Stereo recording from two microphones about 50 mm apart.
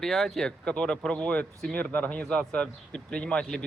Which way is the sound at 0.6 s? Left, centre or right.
Centre.